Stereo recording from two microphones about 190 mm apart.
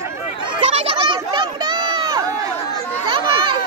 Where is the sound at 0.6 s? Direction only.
35° right (ahead or behind).